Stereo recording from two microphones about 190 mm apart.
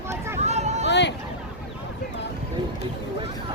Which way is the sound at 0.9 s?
65° left (ahead or behind).